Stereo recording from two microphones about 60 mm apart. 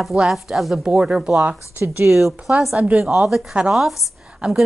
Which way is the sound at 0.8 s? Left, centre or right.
Centre.